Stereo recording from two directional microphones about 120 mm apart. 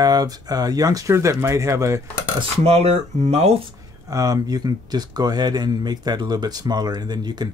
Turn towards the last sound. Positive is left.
turn(degrees=-35)  # may be behind; listen again after turning